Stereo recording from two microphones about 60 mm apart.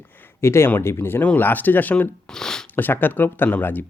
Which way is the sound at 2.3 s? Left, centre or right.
Centre.